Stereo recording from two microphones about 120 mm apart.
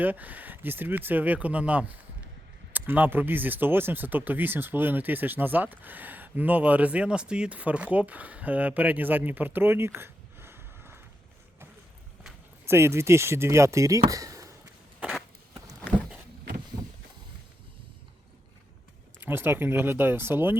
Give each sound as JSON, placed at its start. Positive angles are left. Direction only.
{"t": 0.0, "sound": "speech", "side_deg": -15}
{"t": 12.6, "sound": "speech", "side_deg": -20}
{"t": 14.1, "sound": "a sound", "side_deg": -30}
{"t": 19.2, "sound": "speech", "side_deg": -20}